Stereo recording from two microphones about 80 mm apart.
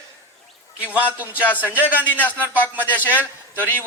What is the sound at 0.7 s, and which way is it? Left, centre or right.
Speech, centre.